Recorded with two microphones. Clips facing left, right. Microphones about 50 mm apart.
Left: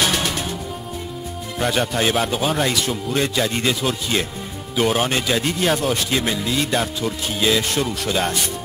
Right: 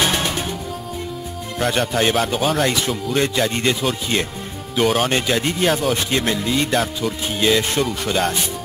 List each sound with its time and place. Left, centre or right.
0.0 s music: centre
1.6 s speech: centre